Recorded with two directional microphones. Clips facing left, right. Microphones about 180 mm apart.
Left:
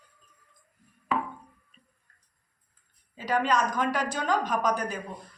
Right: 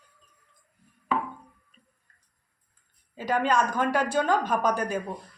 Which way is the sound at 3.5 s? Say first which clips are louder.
Right 2 dB; 30° right (ahead or behind).